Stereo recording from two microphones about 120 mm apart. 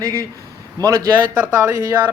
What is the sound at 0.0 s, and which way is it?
A man's voice, 30° right (ahead or behind).